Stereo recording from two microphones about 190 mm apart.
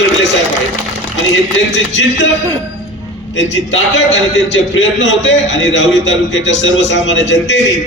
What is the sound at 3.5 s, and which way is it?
A man's voice, 75° left (ahead or behind).